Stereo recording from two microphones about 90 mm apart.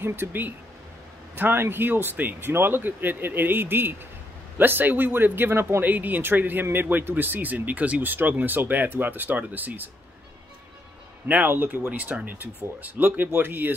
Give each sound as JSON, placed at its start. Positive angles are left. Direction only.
{"t": 0.0, "sound": "speech", "side_deg": -25}
{"t": 11.2, "sound": "speech", "side_deg": -20}